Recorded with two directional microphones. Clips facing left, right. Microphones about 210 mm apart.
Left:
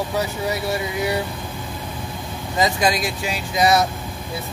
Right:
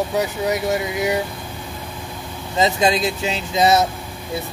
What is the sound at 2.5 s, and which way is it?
Speech, 25° right (ahead or behind).